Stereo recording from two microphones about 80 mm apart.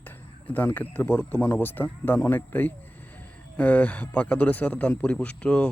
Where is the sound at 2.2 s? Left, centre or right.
Left.